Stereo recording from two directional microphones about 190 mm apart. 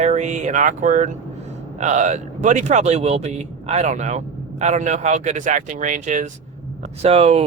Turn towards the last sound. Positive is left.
turn(degrees=-35)  # may be behind; listen again after turning